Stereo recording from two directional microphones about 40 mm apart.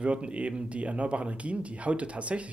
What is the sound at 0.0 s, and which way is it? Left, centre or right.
Speech, right.